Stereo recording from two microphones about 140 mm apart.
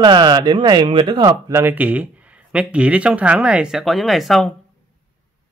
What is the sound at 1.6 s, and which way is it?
Speech, 10° right (ahead or behind).